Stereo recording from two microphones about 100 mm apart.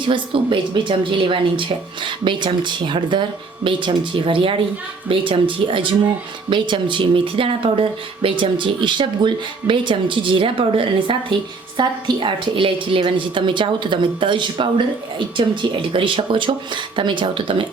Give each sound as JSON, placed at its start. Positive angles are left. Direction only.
{"t": 0.1, "sound": "speech", "side_deg": -55}